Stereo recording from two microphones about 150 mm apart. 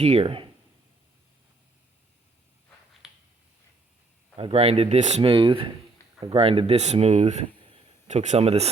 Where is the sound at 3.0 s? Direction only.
Centre (ahead or behind).